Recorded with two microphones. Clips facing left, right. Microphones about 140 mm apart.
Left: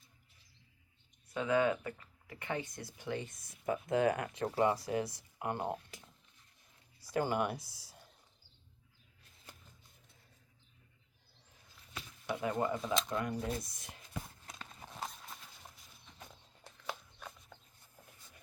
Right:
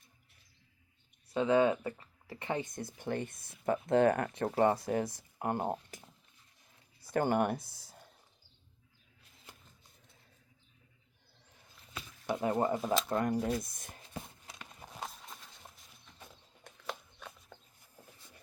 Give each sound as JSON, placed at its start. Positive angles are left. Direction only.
{"t": 1.3, "sound": "speech", "side_deg": -30}
{"t": 2.7, "sound": "speech", "side_deg": -50}
{"t": 7.0, "sound": "speech", "side_deg": -55}
{"t": 12.2, "sound": "speech", "side_deg": -40}
{"t": 14.4, "sound": "clip-clop", "side_deg": -5}
{"t": 16.8, "sound": "a sound", "side_deg": 0}